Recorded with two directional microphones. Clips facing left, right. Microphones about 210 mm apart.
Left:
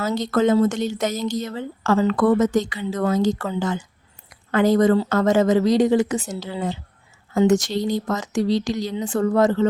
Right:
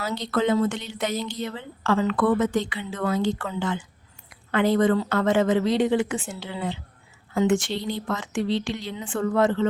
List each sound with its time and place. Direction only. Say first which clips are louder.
0.0 s a woman's voice: left 5 dB; 45° left (ahead or behind)